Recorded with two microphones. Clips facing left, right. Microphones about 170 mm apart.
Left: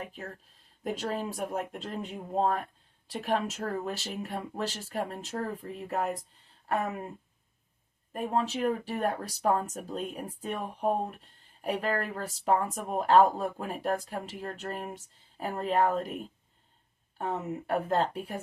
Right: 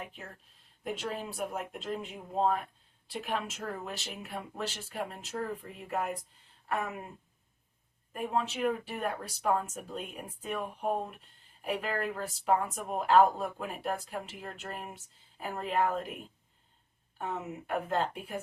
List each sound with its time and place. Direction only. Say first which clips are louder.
0.0 s speech: left 4 dB; 40° left (ahead or behind)
8.1 s speech: left 3 dB; 40° left (ahead or behind)
17.2 s speech: left 4 dB; 35° left (ahead or behind)